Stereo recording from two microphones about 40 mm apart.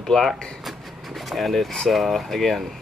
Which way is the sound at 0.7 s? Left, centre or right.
Centre.